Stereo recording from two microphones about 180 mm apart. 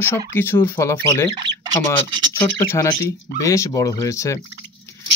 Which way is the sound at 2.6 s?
15° left (ahead or behind).